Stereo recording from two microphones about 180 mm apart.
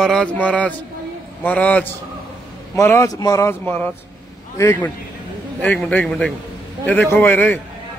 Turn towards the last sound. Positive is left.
turn(degrees=10)  # may be behind; listen again after turning